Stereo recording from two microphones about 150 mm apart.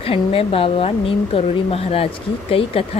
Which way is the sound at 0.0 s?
40° left (ahead or behind).